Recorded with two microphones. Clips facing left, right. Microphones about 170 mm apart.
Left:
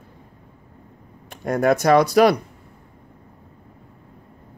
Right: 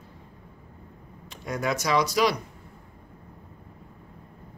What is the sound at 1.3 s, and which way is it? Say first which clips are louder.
Speech: left 10 dB; 55° left (ahead or behind).